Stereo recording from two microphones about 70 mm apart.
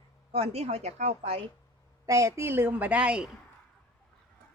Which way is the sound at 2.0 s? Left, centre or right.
Right.